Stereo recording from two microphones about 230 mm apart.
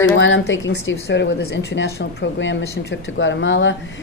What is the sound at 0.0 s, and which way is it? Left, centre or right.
Speech, left.